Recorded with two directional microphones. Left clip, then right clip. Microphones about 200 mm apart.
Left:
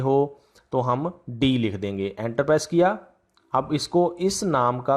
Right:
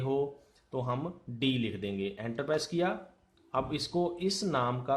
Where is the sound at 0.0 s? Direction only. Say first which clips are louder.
Left 10 dB; 40° left (ahead or behind).